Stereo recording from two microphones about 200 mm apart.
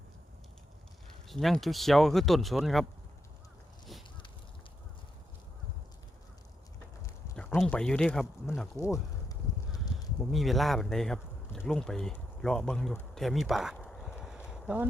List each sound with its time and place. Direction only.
1.3 s speech: centre (ahead or behind)
7.3 s speech: 5° left (ahead or behind)
8.8 s a sound: 15° left (ahead or behind)
10.3 s speech: centre (ahead or behind)